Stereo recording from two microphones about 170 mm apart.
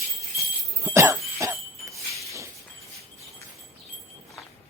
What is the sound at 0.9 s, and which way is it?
Cough, 15° right (ahead or behind).